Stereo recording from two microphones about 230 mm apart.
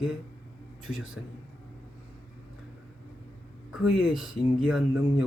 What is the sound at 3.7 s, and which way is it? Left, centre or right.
A man's voice, centre.